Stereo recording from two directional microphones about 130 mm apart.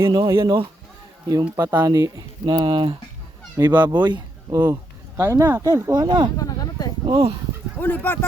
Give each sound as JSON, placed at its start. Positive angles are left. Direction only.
{"t": 0.1, "sound": "speech", "side_deg": -35}
{"t": 5.1, "sound": "speech", "side_deg": -20}
{"t": 6.3, "sound": "a sound", "side_deg": 30}
{"t": 7.0, "sound": "speech", "side_deg": -40}
{"t": 7.8, "sound": "speech", "side_deg": 15}